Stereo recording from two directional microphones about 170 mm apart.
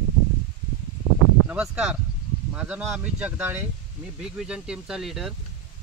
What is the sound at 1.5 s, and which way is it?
Speech, 5° right (ahead or behind).